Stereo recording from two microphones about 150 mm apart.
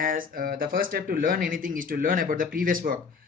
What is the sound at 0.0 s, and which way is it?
Speech, 70° right (ahead or behind).